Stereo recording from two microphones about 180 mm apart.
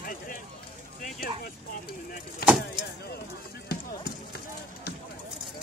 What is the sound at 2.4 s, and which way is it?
Vehicle, 60° left (ahead or behind).